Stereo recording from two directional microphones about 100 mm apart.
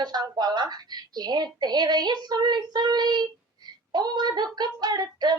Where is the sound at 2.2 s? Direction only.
45° right (ahead or behind).